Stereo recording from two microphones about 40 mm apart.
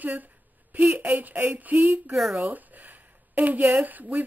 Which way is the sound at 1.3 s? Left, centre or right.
Right.